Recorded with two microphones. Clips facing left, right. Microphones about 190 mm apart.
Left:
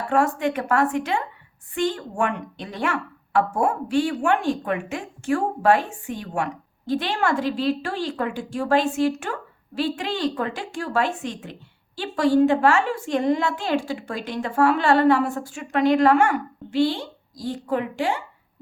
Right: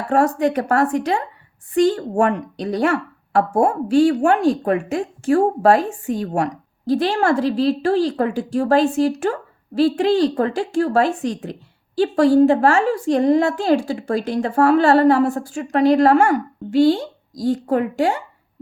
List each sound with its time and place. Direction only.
0.1 s a woman's voice: 35° right (ahead or behind)